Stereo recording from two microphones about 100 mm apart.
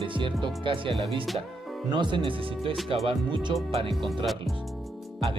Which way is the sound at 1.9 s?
50° right (ahead or behind).